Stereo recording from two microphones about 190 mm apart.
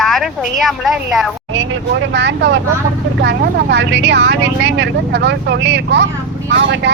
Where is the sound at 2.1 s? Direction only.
70° right (ahead or behind).